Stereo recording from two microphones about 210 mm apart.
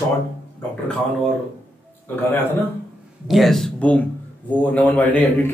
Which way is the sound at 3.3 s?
Centre (ahead or behind).